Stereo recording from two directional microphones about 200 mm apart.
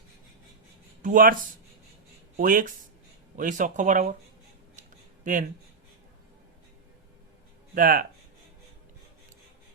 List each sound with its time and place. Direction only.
1.0 s speech: 45° right (ahead or behind)
4.8 s a sound: 40° right (ahead or behind)
7.8 s speech: 45° right (ahead or behind)